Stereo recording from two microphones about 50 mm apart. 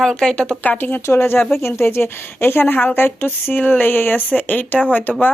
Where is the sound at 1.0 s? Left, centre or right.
Left.